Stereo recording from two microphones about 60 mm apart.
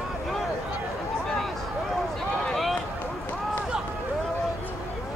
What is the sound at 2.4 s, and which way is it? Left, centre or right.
Run, centre.